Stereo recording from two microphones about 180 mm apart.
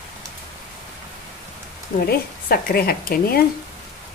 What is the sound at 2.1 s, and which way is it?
A woman's voice, 55° left (ahead or behind).